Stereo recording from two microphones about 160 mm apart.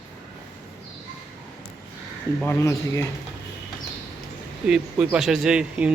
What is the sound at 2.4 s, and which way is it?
Speech, 20° left (ahead or behind).